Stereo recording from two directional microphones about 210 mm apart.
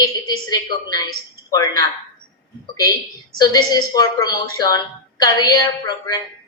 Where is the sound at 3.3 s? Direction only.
20° left (ahead or behind).